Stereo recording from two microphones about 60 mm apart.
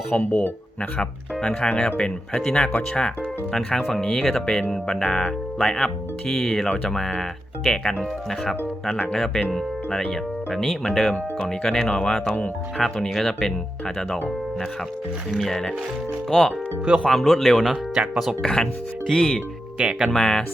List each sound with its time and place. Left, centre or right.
0.1 s speech: centre
16.3 s speech: centre
18.4 s speech: centre
19.8 s speech: centre
20.1 s speech: centre